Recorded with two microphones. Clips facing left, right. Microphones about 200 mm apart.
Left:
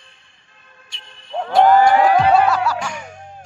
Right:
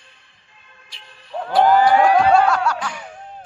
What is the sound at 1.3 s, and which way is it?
Cattle, 25° left (ahead or behind).